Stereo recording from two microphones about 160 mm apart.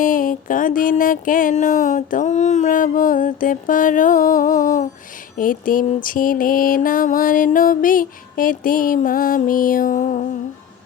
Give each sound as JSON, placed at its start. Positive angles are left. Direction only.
{"t": 0.0, "sound": "mantra", "side_deg": 60}